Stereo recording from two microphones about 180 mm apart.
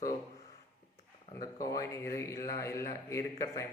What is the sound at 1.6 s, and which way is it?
A man's voice, 20° left (ahead or behind).